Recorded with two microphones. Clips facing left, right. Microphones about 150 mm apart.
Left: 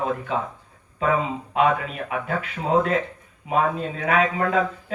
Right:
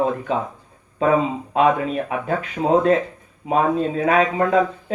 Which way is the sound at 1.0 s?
30° right (ahead or behind).